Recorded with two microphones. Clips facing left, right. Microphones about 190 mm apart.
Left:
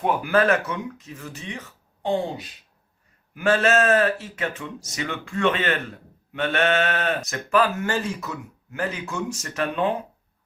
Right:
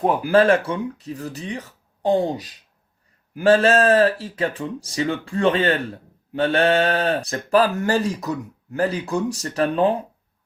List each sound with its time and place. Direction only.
0.0 s speech: 30° right (ahead or behind)